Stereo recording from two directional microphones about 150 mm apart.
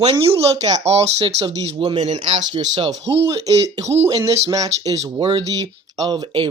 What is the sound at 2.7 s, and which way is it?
Speech, 25° right (ahead or behind).